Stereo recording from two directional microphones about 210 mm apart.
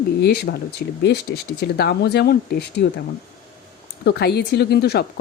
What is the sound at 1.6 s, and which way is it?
Speech, 50° left (ahead or behind).